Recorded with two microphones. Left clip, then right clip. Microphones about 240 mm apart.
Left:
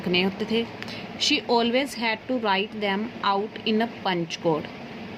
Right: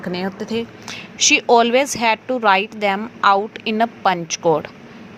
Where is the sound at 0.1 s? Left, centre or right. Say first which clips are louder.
Left 1 dB; centre.